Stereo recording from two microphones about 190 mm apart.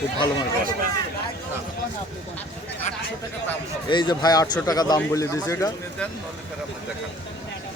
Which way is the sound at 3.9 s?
25° left (ahead or behind).